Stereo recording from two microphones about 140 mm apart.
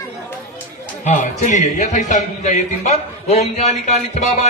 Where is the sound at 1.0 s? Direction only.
60° left (ahead or behind).